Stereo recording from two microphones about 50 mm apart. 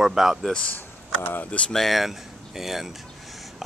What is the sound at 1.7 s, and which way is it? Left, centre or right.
Speech, centre.